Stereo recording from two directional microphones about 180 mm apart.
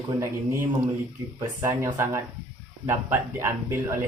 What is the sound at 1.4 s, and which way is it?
Speech, 15° right (ahead or behind).